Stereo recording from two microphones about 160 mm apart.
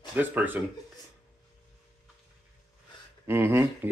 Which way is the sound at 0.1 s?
10° right (ahead or behind).